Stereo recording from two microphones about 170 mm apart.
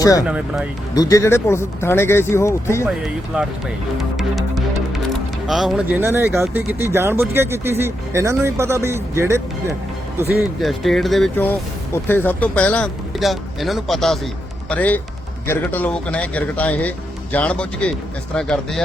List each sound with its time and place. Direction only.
0.0 s speech: 20° left (ahead or behind)
0.3 s speech: 5° right (ahead or behind)
0.9 s speech: 20° left (ahead or behind)
2.8 s speech: 5° right (ahead or behind)
3.9 s music: centre (ahead or behind)
5.5 s speech: centre (ahead or behind)
10.6 s speech: centre (ahead or behind)
12.0 s speech: 10° left (ahead or behind)